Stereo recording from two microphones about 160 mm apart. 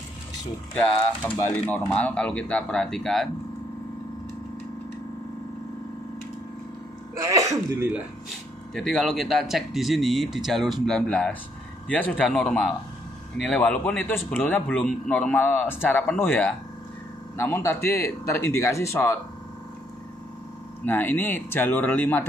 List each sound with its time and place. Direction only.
1.4 s a man's voice: 10° left (ahead or behind)
7.2 s sneeze: 20° right (ahead or behind)
8.7 s a man's voice: centre (ahead or behind); by 19.1 s 15° left (ahead or behind)
20.8 s a man's voice: 10° left (ahead or behind)